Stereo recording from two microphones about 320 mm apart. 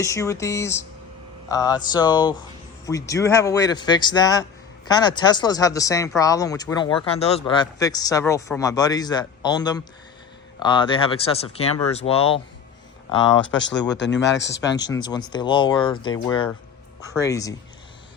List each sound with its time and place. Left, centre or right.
0.0 s speech: centre
13.1 s speech: left
15.0 s speech: centre